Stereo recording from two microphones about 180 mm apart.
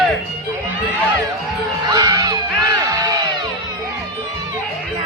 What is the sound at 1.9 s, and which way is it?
Music, 20° right (ahead or behind).